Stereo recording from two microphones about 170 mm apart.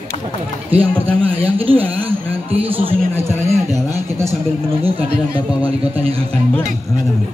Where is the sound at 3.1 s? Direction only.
15° right (ahead or behind).